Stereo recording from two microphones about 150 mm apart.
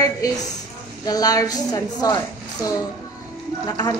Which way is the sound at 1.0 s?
25° left (ahead or behind).